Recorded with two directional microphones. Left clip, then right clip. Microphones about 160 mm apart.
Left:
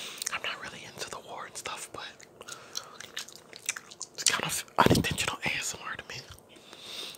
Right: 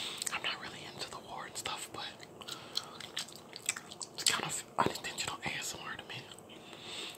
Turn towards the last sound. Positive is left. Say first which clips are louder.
# left 3 dB
turn(degrees=40)  # may be behind; listen again after turning